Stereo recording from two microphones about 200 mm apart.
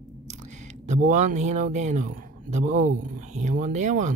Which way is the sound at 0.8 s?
35° right (ahead or behind).